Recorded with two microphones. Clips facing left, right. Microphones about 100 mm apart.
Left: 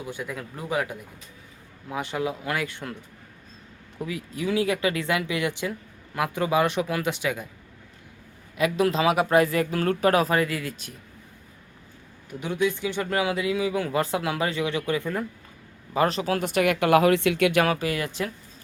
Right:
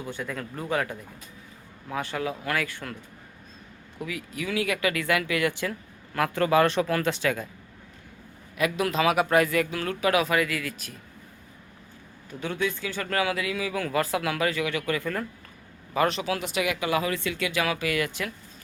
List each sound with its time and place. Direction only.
0.0 s speech: 10° left (ahead or behind)
3.9 s speech: 25° left (ahead or behind)
8.5 s speech: 30° left (ahead or behind)
12.3 s speech: 15° left (ahead or behind)
16.0 s speech: 35° left (ahead or behind)
16.5 s speech: 55° left (ahead or behind)
17.7 s speech: 35° left (ahead or behind)